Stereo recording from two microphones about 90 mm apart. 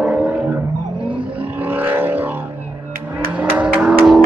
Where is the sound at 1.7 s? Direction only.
25° right (ahead or behind).